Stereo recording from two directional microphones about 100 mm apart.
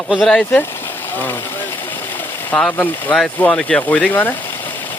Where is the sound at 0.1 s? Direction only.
5° left (ahead or behind).